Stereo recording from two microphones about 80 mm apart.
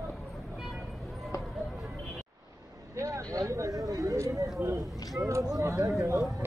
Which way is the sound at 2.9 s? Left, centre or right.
Right.